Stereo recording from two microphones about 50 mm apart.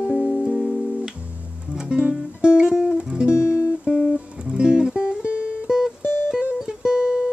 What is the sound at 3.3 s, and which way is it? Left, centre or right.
Music, left.